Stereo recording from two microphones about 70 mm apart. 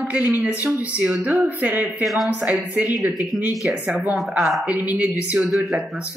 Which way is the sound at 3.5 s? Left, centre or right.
Centre.